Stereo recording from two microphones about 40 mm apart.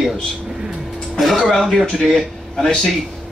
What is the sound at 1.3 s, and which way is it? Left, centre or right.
Speech, centre.